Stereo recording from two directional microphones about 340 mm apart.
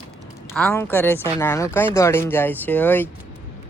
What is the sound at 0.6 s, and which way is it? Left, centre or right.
Speech, centre.